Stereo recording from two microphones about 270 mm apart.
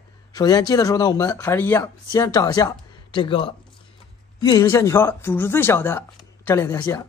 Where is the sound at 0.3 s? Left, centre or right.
Centre.